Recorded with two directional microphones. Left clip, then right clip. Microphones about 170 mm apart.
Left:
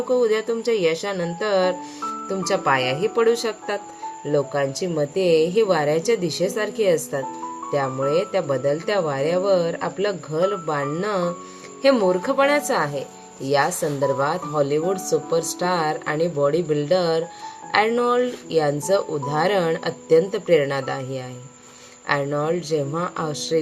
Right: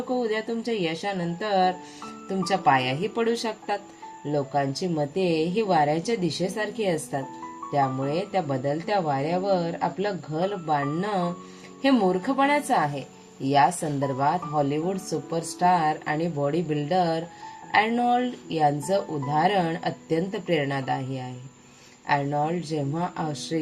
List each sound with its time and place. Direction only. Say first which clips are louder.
0.1 s speech: left 7 dB; 15° left (ahead or behind)